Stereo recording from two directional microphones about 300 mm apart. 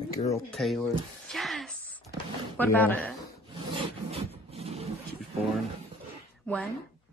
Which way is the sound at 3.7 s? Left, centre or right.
Centre.